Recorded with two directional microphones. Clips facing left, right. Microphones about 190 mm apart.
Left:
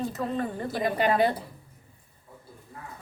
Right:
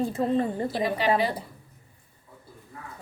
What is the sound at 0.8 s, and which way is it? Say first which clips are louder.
Speech: left 2 dB; 50° left (ahead or behind).